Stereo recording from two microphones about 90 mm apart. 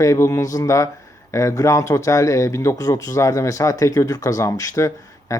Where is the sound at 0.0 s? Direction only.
35° left (ahead or behind).